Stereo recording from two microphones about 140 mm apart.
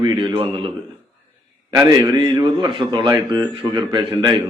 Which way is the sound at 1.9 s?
25° right (ahead or behind).